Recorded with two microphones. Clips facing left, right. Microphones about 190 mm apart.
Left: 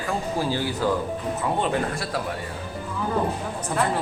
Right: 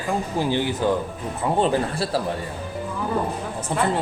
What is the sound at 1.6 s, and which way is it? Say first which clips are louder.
Speech: right 4 dB; 30° right (ahead or behind).